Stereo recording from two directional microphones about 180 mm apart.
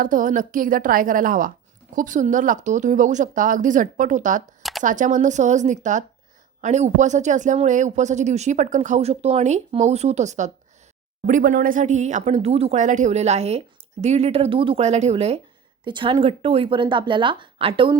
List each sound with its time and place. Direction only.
0.0 s speech: 50° right (ahead or behind); by 17.9 s 30° right (ahead or behind)